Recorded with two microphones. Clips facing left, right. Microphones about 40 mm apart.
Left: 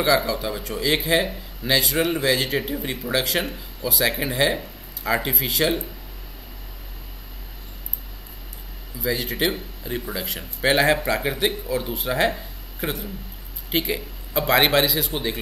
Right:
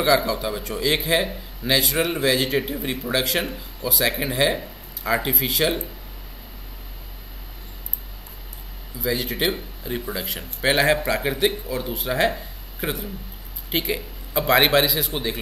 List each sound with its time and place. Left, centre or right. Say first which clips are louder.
0.0 s a man's voice: right 1 dB; centre
9.0 s a man's voice: even; centre